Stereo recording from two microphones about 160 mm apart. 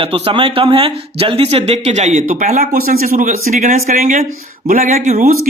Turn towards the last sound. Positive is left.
turn(degrees=-45)  # may be behind; listen again after turning